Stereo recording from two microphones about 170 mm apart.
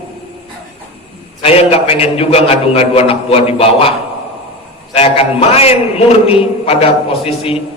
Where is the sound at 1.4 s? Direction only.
35° left (ahead or behind).